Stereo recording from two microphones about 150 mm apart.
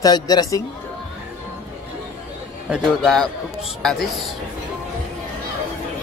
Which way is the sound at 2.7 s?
Centre (ahead or behind).